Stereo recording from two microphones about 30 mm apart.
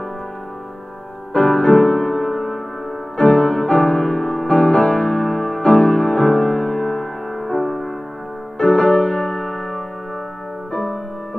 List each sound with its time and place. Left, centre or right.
1.3 s music: left; by 2.6 s centre
3.2 s music: left
5.6 s music: left; by 7.9 s centre
8.5 s music: left; by 9.8 s centre
10.7 s music: left